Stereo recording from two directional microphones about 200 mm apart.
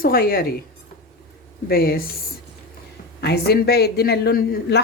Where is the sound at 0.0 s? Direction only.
45° left (ahead or behind).